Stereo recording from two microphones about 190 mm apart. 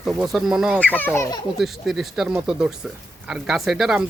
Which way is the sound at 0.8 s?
10° left (ahead or behind).